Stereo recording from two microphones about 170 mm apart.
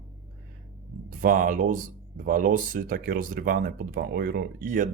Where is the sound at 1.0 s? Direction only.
55° right (ahead or behind).